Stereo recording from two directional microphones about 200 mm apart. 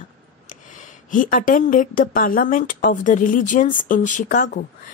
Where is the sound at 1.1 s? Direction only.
40° left (ahead or behind).